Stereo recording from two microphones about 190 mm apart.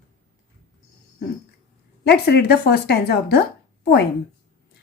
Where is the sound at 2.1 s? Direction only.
55° left (ahead or behind).